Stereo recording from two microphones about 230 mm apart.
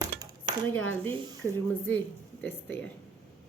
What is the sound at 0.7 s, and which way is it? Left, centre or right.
Speech, centre.